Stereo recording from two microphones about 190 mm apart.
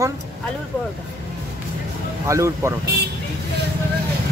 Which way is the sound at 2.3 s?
15° right (ahead or behind).